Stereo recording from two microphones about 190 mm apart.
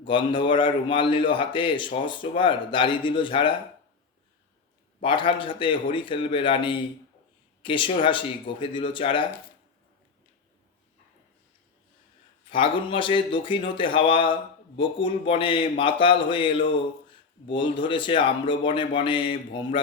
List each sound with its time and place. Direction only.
0.0 s speech: 25° left (ahead or behind)
5.0 s speech: 25° left (ahead or behind)
12.5 s speech: 25° left (ahead or behind)